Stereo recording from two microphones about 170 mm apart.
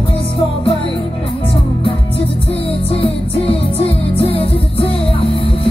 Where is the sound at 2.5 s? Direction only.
35° left (ahead or behind).